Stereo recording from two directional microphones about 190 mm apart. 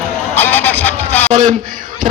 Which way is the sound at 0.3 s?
10° left (ahead or behind).